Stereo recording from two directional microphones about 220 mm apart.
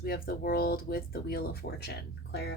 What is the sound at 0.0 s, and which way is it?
Speech, 40° left (ahead or behind).